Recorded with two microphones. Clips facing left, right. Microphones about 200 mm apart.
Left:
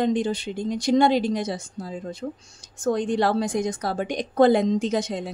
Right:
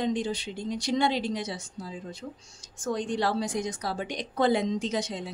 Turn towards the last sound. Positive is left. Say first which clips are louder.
# left 6 dB
turn(degrees=50)  # may be behind; listen again after turning